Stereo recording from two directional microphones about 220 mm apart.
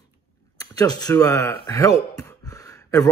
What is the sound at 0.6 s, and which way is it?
Speech, 15° left (ahead or behind).